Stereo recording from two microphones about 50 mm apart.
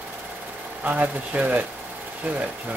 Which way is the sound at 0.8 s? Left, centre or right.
Right.